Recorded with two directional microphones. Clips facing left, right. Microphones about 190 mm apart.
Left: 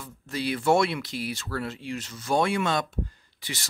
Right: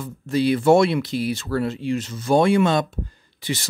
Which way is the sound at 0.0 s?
25° right (ahead or behind).